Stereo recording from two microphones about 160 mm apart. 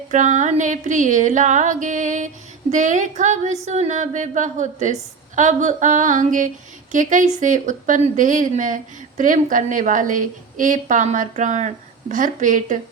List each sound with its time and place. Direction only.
0.1 s music: 50° right (ahead or behind)